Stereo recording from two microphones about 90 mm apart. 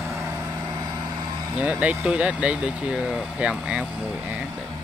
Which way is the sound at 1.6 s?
15° right (ahead or behind).